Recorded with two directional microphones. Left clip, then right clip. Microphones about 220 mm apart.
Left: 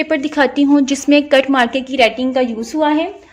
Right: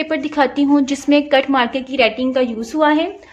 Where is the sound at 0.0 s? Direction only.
10° left (ahead or behind).